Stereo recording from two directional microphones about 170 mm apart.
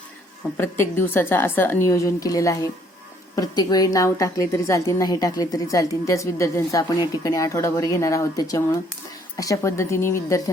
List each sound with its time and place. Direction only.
0.5 s a woman's voice: 15° left (ahead or behind)